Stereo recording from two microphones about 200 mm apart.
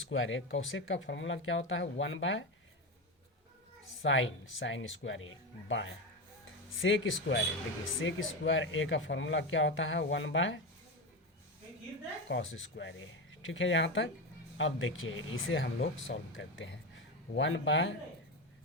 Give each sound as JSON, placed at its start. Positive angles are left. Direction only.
{"t": 0.1, "sound": "speech", "side_deg": 75}
{"t": 4.0, "sound": "speech", "side_deg": 70}
{"t": 12.3, "sound": "speech", "side_deg": 65}